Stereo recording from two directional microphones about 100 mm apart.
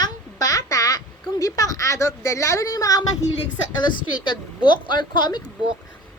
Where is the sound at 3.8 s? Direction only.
50° left (ahead or behind).